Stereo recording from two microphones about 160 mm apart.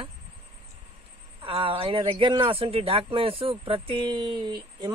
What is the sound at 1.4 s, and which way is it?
Speech, 35° right (ahead or behind).